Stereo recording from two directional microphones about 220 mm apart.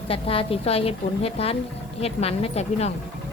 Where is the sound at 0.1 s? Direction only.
25° left (ahead or behind).